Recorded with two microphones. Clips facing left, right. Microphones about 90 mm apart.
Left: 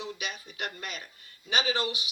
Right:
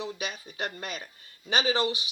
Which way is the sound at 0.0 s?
35° right (ahead or behind).